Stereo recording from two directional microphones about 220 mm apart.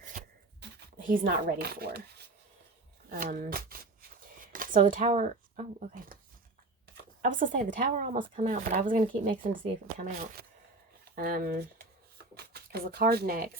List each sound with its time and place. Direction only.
0.6 s speech: 40° right (ahead or behind)
7.2 s speech: 35° right (ahead or behind)
11.1 s shuffling cards: 40° right (ahead or behind)